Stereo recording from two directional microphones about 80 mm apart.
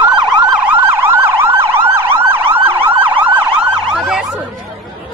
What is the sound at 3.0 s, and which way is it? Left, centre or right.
Emergency vehicle, right.